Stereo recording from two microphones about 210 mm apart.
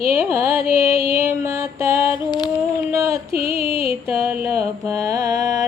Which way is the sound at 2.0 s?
20° left (ahead or behind).